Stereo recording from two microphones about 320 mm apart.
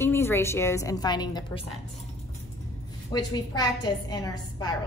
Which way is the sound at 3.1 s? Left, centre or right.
Centre.